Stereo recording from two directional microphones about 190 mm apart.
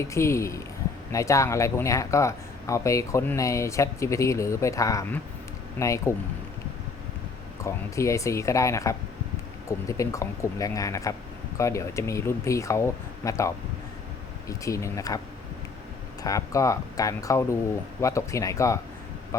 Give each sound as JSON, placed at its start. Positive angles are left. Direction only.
{"t": 0.0, "sound": "speech", "side_deg": 15}
{"t": 7.6, "sound": "speech", "side_deg": 15}
{"t": 16.2, "sound": "speech", "side_deg": 15}